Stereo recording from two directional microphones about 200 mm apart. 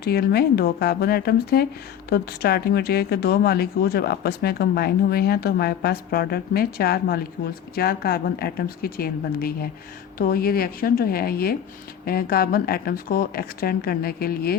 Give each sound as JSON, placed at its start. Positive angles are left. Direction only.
{"t": 0.0, "sound": "speech", "side_deg": 50}